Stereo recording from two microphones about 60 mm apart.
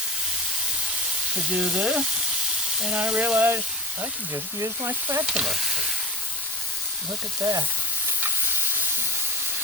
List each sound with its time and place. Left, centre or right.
1.5 s speech: centre
4.6 s speech: right
5.2 s frying: centre
7.4 s frying: right